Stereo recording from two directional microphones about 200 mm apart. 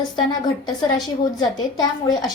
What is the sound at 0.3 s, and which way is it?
A woman's voice, 20° left (ahead or behind).